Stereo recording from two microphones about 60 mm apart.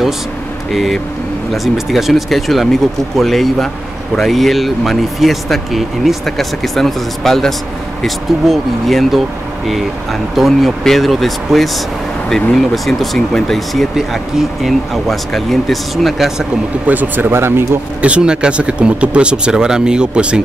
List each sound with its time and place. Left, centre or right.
0.7 s speech: centre
16.8 s speech: right
18.0 s speech: centre